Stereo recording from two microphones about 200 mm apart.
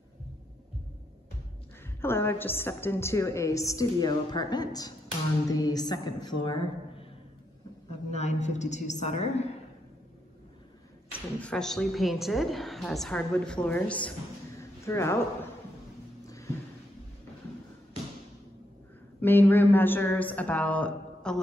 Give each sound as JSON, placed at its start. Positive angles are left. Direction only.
{"t": 2.0, "sound": "a woman's voice", "side_deg": 10}
{"t": 11.1, "sound": "a woman's voice", "side_deg": 5}
{"t": 14.6, "sound": "a sound", "side_deg": 15}
{"t": 19.2, "sound": "a woman's voice", "side_deg": 10}